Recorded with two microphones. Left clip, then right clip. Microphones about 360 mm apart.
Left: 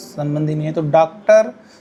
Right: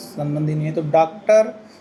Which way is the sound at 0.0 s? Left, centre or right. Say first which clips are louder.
Left 3 dB; left.